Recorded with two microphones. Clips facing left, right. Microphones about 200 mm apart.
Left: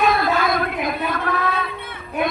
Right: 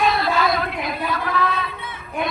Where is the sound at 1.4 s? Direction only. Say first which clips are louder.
Even; 55° left (ahead or behind).